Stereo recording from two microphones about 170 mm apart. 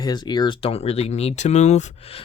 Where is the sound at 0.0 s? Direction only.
25° left (ahead or behind).